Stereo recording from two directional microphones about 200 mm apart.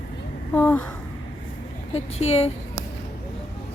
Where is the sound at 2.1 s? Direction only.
30° left (ahead or behind).